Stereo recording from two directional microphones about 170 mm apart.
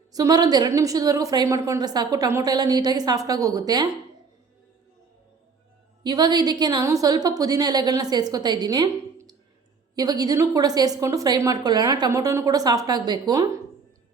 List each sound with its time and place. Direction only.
0.1 s a woman's voice: 20° right (ahead or behind)
6.0 s a woman's voice: 25° right (ahead or behind)